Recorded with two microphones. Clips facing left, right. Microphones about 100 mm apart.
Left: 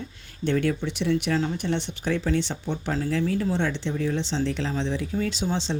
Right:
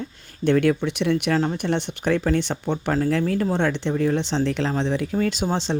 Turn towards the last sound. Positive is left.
turn(degrees=-55)  # may be behind; listen again after turning